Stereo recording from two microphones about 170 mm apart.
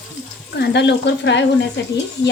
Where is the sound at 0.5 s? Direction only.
80° left.